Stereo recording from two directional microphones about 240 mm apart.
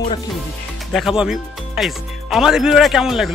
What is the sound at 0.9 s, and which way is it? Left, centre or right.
Speech, centre.